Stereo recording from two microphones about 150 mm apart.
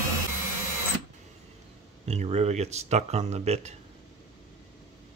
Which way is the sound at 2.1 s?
45° right (ahead or behind).